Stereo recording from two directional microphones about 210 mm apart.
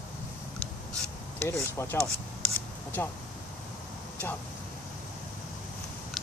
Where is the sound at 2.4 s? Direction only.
10° left (ahead or behind).